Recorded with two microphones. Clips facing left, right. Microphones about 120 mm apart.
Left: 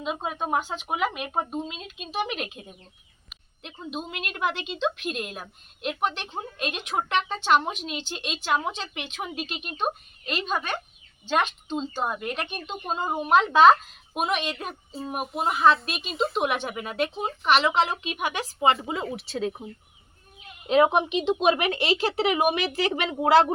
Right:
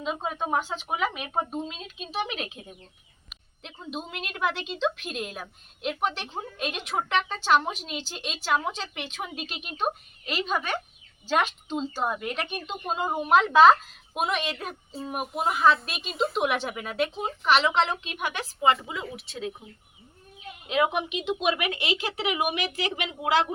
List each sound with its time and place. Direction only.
0.0 s a woman's voice: 5° left (ahead or behind)
18.9 s speech: 30° left (ahead or behind)
20.7 s speech: 35° left (ahead or behind)